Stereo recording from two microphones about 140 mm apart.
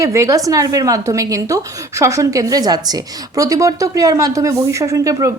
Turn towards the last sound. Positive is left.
turn(degrees=-25)  # may be behind; listen again after turning